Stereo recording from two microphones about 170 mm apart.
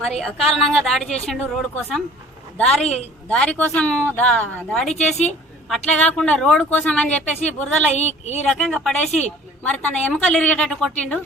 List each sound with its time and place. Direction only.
0.2 s a woman's voice: centre (ahead or behind)
7.9 s speech: 40° left (ahead or behind)
8.4 s a woman's voice: 5° left (ahead or behind)